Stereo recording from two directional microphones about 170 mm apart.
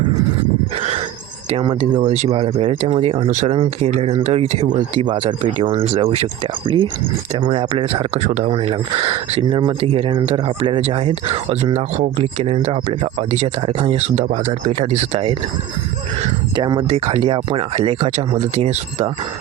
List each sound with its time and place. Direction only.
2.0 s speech: 40° right (ahead or behind)
3.2 s speech: 45° right (ahead or behind)
5.0 s speech: 30° right (ahead or behind)
16.6 s speech: 30° right (ahead or behind)